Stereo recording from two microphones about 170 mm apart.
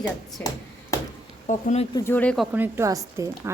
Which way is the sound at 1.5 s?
45° left (ahead or behind).